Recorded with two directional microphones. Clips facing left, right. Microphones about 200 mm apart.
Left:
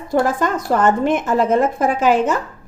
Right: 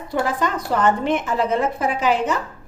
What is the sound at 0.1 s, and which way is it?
Speech, 45° left (ahead or behind).